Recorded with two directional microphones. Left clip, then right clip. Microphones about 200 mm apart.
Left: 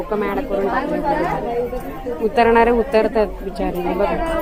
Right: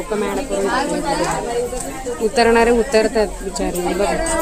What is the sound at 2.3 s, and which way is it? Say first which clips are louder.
Speech: even; 15° right (ahead or behind).